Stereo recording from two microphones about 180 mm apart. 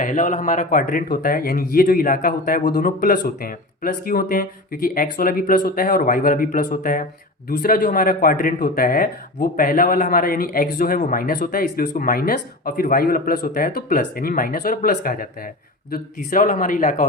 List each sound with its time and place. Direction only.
0.0 s speech: 45° left (ahead or behind)